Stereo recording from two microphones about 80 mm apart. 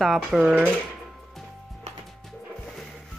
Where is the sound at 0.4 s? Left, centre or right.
Centre.